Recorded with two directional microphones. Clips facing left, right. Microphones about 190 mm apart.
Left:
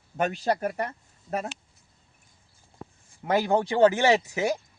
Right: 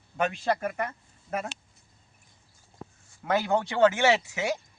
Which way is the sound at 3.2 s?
25° left (ahead or behind).